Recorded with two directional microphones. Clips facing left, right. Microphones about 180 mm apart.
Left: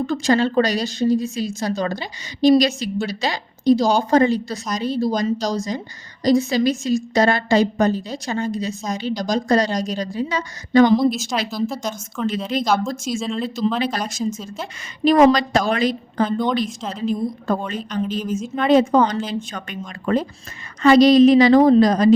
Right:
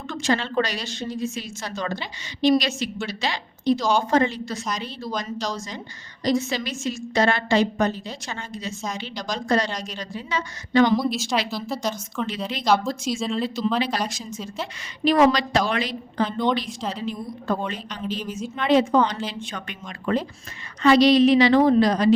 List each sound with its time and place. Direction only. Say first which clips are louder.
0.1 s a woman's voice: left 4 dB; 35° left (ahead or behind)
11.7 s a woman's voice: even; 5° left (ahead or behind)
12.5 s a woman's voice: even; 45° left (ahead or behind)
13.1 s a woman's voice: right 1 dB; centre (ahead or behind)
14.1 s a woman's voice: left 9 dB; 45° left (ahead or behind)